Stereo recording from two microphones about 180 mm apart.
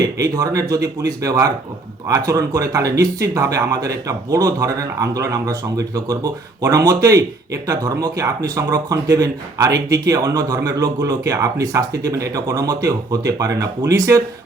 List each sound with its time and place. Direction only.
0.0 s speech: 20° right (ahead or behind)